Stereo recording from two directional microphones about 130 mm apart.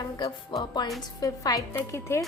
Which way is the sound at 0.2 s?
30° left (ahead or behind).